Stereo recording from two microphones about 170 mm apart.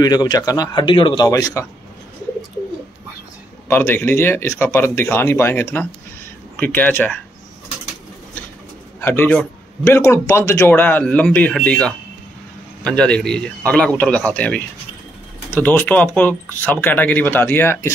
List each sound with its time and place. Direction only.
0.0 s speech: 25° left (ahead or behind)
3.6 s speech: 10° left (ahead or behind)
9.0 s a man's voice: 10° left (ahead or behind)